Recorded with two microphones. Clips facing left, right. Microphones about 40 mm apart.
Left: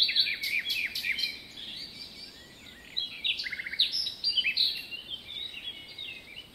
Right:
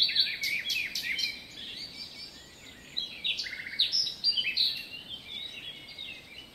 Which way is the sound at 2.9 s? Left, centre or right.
Left.